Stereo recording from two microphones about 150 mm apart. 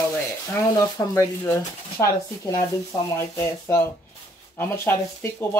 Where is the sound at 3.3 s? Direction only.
15° left (ahead or behind).